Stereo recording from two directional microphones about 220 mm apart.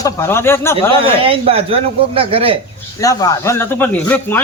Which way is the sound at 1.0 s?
25° right (ahead or behind).